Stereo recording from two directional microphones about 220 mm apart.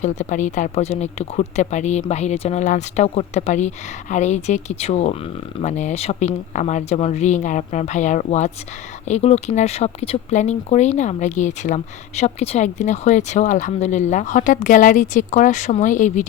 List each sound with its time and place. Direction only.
0.0 s speech: 35° left (ahead or behind)